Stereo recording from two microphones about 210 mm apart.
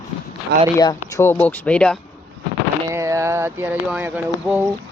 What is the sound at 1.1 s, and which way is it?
Speech, 10° left (ahead or behind).